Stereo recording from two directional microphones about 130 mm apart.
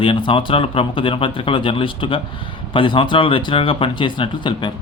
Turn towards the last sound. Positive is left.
turn(degrees=40)  # may be behind; listen again after turning